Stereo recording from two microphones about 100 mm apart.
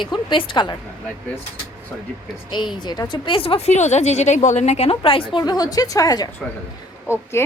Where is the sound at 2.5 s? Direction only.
50° left (ahead or behind); by 5.4 s 65° left (ahead or behind).